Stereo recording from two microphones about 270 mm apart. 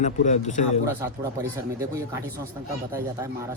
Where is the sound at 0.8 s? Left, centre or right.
Centre.